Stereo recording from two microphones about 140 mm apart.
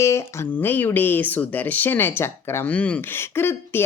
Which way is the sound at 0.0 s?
20° left (ahead or behind).